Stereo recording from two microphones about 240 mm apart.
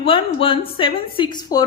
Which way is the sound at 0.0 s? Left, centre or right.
Left.